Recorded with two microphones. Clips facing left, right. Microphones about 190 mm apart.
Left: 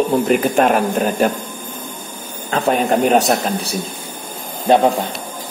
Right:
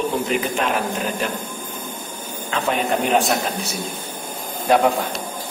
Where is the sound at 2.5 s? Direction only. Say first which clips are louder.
Left 5 dB; 40° left (ahead or behind).